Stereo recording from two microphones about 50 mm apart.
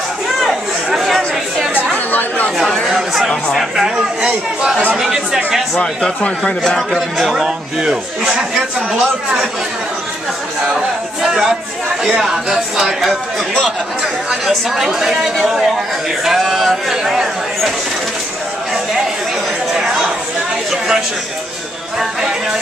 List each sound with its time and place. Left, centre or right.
0.8 s chatter: centre
2.0 s chatter: left
2.9 s chatter: centre
3.5 s a sound: centre
4.3 s chatter: centre
4.9 s chatter: centre
6.2 s speech: centre
7.0 s a man's voice: centre
11.2 s chatter: centre
12.0 s a man's voice: centre
14.3 s a man's voice: centre
19.7 s a sound: centre